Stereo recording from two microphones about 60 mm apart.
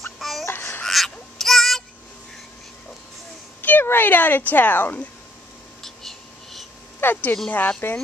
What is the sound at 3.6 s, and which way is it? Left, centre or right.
Speech, left.